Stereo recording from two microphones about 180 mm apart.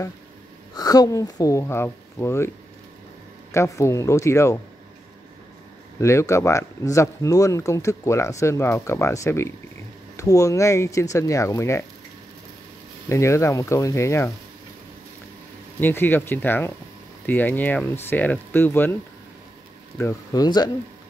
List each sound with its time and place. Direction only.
0.7 s speech: 20° left (ahead or behind)
3.5 s speech: 15° left (ahead or behind)
5.9 s speech: 15° left (ahead or behind)
13.1 s speech: 15° left (ahead or behind)
15.8 s speech: 10° left (ahead or behind)
20.0 s speech: 20° left (ahead or behind)